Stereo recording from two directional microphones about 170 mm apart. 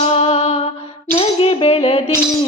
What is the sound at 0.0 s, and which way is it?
Music, 35° left (ahead or behind).